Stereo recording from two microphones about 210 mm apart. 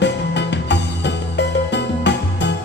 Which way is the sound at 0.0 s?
55° left (ahead or behind).